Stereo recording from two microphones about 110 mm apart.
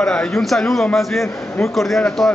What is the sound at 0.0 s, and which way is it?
A man's voice, 5° left (ahead or behind).